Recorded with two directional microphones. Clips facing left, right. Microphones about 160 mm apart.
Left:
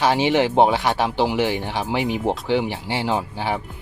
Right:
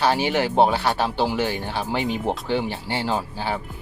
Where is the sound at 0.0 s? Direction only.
20° left (ahead or behind).